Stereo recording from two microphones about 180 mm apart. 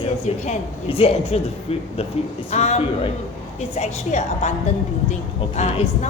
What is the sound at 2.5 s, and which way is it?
Speech, 35° left (ahead or behind).